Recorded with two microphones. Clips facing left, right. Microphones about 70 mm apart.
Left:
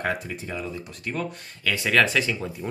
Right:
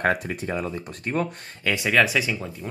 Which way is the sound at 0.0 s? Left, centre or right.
Right.